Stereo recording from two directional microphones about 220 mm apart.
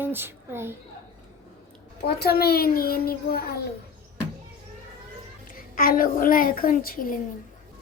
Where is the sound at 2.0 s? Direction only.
45° left (ahead or behind).